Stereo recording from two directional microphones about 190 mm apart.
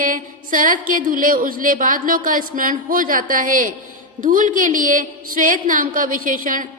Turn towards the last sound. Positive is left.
turn(degrees=-45)  # may be behind; listen again after turning